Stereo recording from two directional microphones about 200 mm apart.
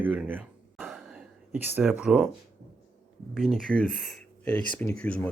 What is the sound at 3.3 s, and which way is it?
Speech, centre (ahead or behind).